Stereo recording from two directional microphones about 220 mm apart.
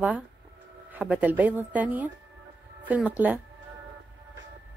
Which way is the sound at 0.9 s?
5° right (ahead or behind).